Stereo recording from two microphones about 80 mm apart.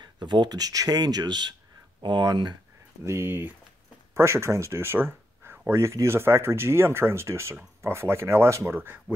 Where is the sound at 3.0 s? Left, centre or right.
Right.